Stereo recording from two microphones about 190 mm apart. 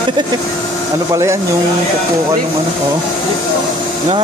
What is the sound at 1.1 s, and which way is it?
Speech, 15° right (ahead or behind).